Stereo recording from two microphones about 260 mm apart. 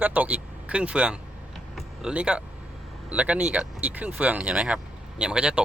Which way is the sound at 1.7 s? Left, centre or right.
Centre.